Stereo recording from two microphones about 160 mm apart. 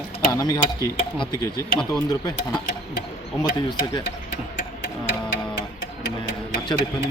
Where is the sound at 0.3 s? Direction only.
20° left (ahead or behind).